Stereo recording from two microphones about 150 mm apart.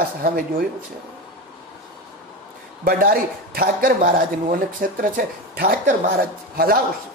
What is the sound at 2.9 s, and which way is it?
Speech, 75° right (ahead or behind).